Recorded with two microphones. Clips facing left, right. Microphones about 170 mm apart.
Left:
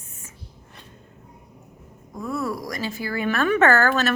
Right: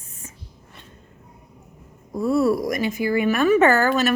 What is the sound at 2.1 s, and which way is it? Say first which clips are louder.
A woman's voice: right 9 dB; 30° right (ahead or behind).